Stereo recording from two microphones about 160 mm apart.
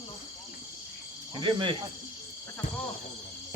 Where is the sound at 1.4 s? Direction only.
30° right (ahead or behind).